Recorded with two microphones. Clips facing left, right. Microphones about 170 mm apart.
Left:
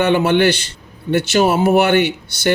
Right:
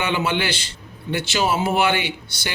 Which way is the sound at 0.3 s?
60° left (ahead or behind).